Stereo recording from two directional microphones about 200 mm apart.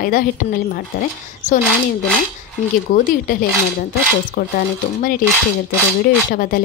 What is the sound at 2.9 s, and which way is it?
Speech, 45° left (ahead or behind).